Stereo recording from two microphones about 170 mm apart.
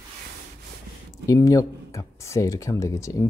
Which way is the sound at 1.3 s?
20° left (ahead or behind).